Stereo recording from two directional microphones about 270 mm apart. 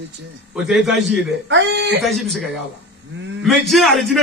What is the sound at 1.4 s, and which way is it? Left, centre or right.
Speech, right.